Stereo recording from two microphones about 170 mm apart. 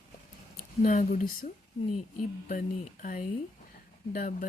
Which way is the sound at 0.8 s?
50° left (ahead or behind).